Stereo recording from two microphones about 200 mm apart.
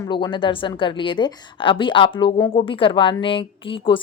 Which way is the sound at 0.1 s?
25° left (ahead or behind).